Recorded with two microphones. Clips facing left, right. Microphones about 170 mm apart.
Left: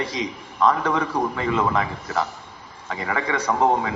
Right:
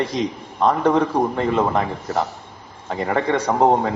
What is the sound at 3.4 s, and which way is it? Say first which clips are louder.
Speech: right 2 dB; 30° right (ahead or behind).